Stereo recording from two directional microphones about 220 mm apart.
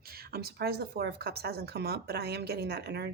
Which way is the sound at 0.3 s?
45° right (ahead or behind).